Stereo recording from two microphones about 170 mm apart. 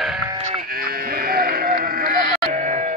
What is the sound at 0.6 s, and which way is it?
Sheep, 60° right (ahead or behind).